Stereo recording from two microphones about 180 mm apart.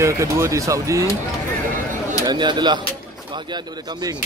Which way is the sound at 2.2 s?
25° right (ahead or behind).